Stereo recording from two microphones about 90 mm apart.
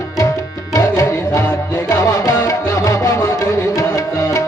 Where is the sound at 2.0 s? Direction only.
40° left (ahead or behind).